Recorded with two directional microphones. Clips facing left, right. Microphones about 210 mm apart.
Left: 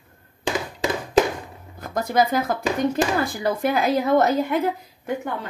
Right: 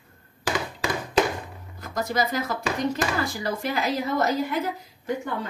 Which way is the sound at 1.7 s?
55° left (ahead or behind).